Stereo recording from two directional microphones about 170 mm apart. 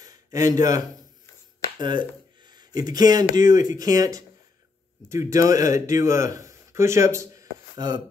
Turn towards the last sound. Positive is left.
turn(degrees=-20)  # may be behind; listen again after turning